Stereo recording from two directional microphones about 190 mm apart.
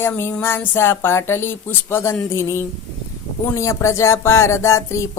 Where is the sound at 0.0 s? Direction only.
10° left (ahead or behind).